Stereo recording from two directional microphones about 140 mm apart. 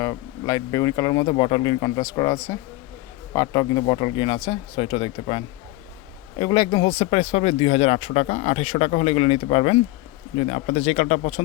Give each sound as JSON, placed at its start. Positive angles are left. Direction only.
{"t": 0.0, "sound": "speech", "side_deg": 25}
{"t": 10.3, "sound": "speech", "side_deg": 55}